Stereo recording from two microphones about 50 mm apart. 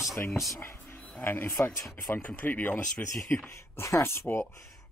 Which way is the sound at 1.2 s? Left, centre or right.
Left.